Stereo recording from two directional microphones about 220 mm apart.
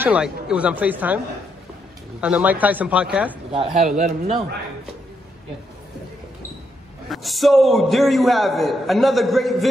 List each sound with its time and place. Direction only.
0.0 s speech: 5° right (ahead or behind)
3.7 s a man's voice: 30° right (ahead or behind)
7.1 s a man's voice: centre (ahead or behind)